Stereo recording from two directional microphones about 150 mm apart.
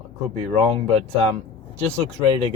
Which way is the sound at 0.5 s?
45° right (ahead or behind).